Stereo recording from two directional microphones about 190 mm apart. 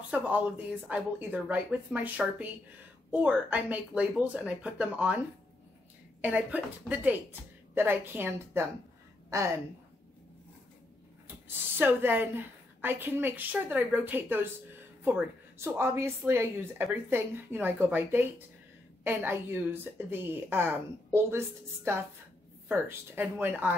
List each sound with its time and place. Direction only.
0.1 s a woman's voice: 10° right (ahead or behind)
6.2 s a woman's voice: 5° right (ahead or behind)
11.4 s a woman's voice: 10° right (ahead or behind)